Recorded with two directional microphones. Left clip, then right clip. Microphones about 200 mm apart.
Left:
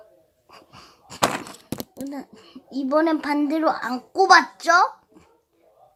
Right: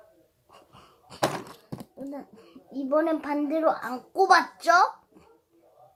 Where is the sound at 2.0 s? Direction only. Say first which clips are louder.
Left 4 dB; 20° left (ahead or behind).